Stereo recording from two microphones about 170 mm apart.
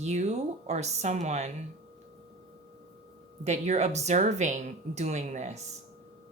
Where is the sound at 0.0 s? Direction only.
40° right (ahead or behind).